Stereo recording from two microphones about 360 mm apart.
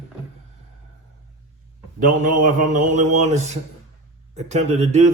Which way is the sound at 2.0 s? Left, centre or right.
Right.